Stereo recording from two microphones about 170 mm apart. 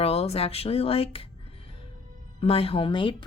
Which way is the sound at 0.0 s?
35° left (ahead or behind).